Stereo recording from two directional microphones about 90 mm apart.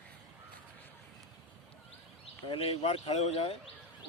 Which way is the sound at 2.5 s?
90° left.